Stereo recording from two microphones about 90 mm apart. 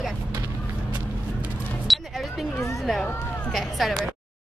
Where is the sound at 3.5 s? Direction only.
Centre (ahead or behind).